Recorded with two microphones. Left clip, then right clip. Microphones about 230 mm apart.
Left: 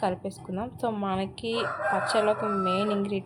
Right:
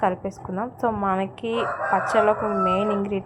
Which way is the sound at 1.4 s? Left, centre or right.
Right.